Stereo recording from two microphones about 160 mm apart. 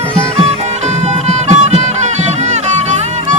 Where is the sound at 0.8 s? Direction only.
45° right (ahead or behind).